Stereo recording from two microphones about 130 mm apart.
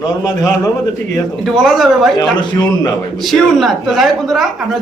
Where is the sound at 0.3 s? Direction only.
30° left (ahead or behind).